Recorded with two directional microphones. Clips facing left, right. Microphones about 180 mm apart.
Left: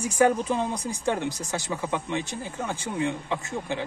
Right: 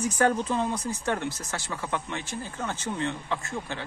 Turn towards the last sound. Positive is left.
turn(degrees=15)  # may be behind; listen again after turning